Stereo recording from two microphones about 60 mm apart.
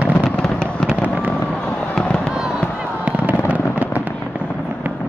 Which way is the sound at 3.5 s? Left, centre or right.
Right.